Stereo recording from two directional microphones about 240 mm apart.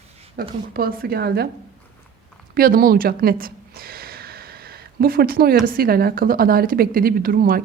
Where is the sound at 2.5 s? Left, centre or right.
Right.